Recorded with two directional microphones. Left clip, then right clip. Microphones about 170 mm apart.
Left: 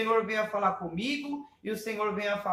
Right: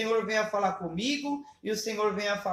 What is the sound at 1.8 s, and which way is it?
Speech, 20° right (ahead or behind).